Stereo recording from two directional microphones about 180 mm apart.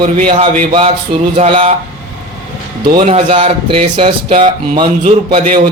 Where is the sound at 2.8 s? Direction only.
25° right (ahead or behind).